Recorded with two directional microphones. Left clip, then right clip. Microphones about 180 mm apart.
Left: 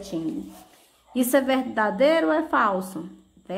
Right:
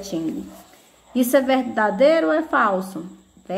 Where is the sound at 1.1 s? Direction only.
10° left (ahead or behind).